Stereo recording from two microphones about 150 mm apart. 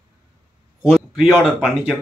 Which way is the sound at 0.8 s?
Centre (ahead or behind).